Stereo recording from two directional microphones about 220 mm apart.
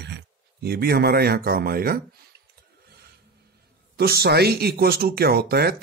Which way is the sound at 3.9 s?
45° right (ahead or behind).